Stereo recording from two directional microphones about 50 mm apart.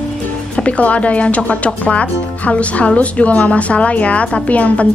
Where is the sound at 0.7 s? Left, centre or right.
Left.